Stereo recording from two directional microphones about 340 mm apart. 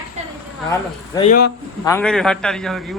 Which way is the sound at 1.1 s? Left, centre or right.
Centre.